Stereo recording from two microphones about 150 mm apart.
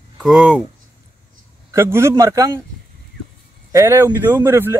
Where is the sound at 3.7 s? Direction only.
15° right (ahead or behind).